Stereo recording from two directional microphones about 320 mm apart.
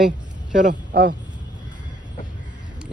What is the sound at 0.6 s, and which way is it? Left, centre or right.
Speech, right.